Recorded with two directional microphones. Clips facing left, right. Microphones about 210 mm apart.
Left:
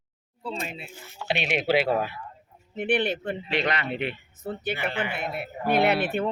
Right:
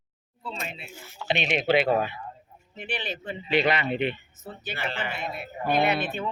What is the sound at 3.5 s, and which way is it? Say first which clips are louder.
Speech: right 5 dB; 5° right (ahead or behind).